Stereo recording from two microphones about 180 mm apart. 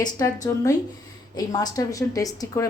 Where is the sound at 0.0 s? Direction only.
20° left (ahead or behind).